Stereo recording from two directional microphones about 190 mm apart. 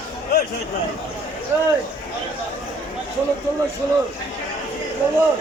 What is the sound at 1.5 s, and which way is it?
Speech, 10° right (ahead or behind).